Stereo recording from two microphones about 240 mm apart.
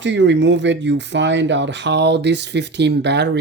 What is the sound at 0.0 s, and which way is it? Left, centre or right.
Speech, right.